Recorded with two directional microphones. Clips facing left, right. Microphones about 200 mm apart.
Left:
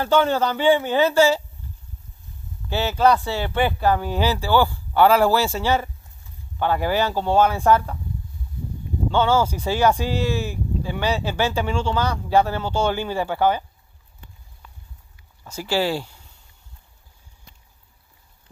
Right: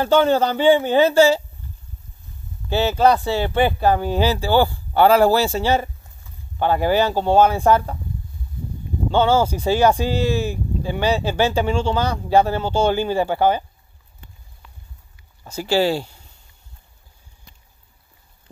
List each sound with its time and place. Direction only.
0.0 s speech: 25° right (ahead or behind)
2.7 s speech: 25° right (ahead or behind)
9.1 s speech: 25° right (ahead or behind)
15.4 s speech: 25° right (ahead or behind)